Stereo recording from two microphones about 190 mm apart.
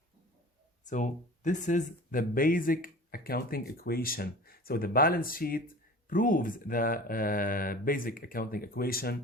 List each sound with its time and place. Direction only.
0.9 s speech: 40° left (ahead or behind)